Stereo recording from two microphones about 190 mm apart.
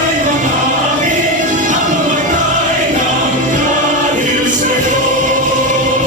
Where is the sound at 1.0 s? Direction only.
40° right (ahead or behind).